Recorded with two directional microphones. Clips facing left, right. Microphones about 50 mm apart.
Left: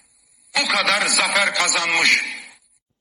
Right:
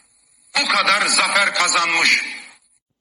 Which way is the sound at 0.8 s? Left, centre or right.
Centre.